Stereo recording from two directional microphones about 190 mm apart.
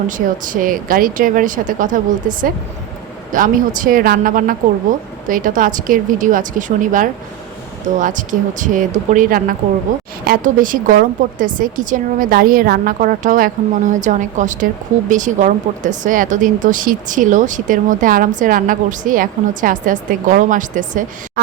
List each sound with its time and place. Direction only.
0.1 s speech: 45° right (ahead or behind)